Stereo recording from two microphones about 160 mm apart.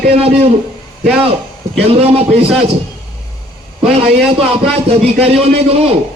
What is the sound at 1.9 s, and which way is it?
Speech, 40° right (ahead or behind).